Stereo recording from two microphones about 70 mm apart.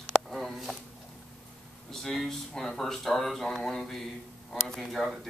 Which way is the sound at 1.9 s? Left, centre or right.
Centre.